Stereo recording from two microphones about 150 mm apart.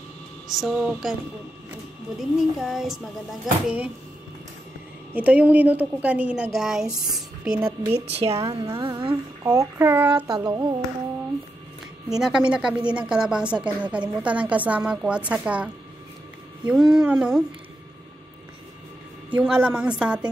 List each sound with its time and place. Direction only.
0.5 s speech: 5° right (ahead or behind)
2.1 s a woman's voice: 5° right (ahead or behind)
5.1 s a woman's voice: 10° right (ahead or behind)
7.9 s a woman's voice: 40° right (ahead or behind)
8.5 s a woman's voice: 25° right (ahead or behind)
9.4 s a woman's voice: 20° right (ahead or behind)
10.4 s music: 30° right (ahead or behind)
12.1 s a woman's voice: 5° right (ahead or behind)
19.3 s a woman's voice: 10° right (ahead or behind)